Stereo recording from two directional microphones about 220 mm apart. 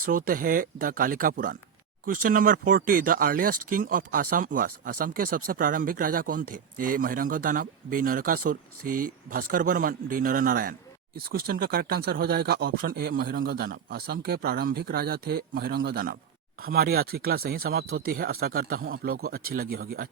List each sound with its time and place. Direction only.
0.0 s speech: 40° right (ahead or behind)